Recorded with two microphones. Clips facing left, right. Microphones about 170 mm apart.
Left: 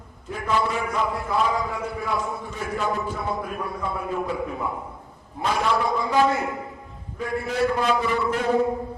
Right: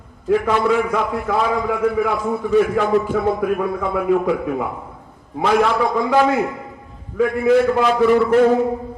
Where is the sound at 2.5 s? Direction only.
70° right (ahead or behind); by 5.7 s 90° right.